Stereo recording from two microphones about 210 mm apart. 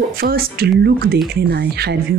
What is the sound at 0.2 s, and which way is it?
Speech, 45° right (ahead or behind).